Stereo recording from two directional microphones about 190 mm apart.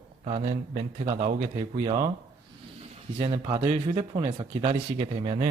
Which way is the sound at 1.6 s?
30° right (ahead or behind).